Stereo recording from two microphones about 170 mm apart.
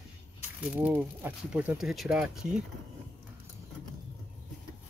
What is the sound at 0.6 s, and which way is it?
Speech, 10° right (ahead or behind).